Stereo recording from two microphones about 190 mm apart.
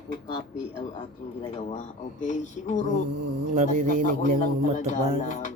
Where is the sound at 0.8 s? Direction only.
30° left (ahead or behind).